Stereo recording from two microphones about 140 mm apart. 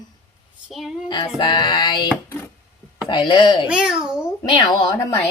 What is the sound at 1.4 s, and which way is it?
Female singing, 35° left (ahead or behind).